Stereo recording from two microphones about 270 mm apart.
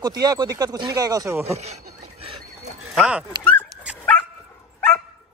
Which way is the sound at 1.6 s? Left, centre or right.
Right.